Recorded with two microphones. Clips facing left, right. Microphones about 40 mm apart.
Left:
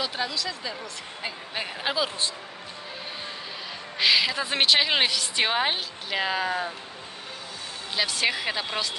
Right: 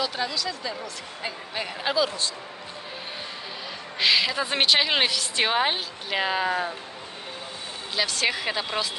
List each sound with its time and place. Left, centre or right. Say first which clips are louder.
0.0 s speech: right 1 dB; centre
4.0 s a woman's voice: even; centre
7.9 s a woman's voice: even; centre